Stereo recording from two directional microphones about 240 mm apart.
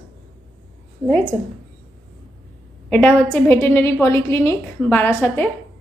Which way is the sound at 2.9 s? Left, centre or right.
Centre.